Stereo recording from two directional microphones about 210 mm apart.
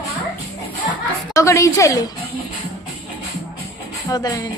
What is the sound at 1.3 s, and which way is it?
Speech, 15° left (ahead or behind).